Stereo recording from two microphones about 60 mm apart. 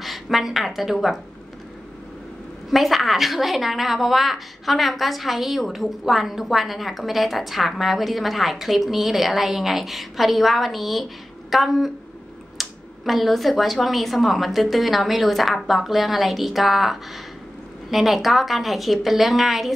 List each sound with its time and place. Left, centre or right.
0.0 s a woman's voice: centre
2.7 s a woman's voice: centre